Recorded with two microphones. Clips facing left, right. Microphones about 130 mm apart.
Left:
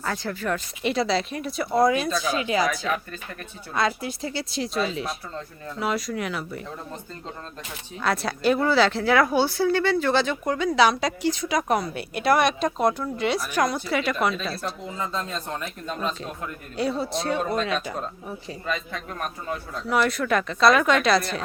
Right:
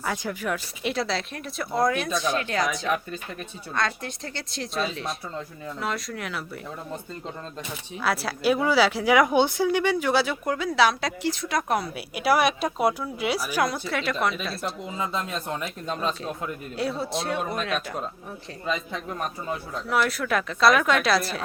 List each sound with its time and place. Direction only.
0.0 s speech: 10° right (ahead or behind)
3.8 s speech: 5° left (ahead or behind)
7.9 s speech: 5° right (ahead or behind)
14.8 s a man's voice: 15° right (ahead or behind)
16.7 s speech: centre (ahead or behind)
18.6 s a man's voice: 15° right (ahead or behind)
19.5 s speech: centre (ahead or behind)